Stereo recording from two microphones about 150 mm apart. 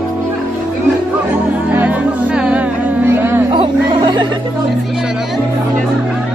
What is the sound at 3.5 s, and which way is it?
Music, 30° right (ahead or behind).